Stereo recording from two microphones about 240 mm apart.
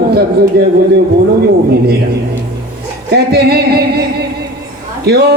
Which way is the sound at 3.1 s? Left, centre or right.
Right.